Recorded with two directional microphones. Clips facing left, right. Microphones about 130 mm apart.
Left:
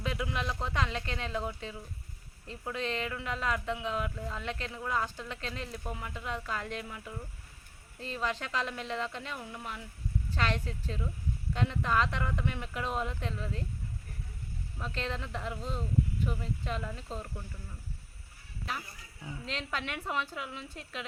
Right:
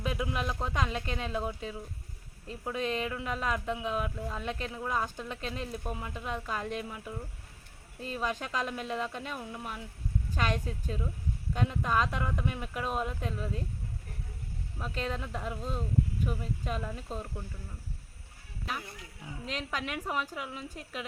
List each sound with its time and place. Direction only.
0.0 s speech: 15° right (ahead or behind)
14.8 s speech: 10° right (ahead or behind)
18.6 s speech: 5° right (ahead or behind)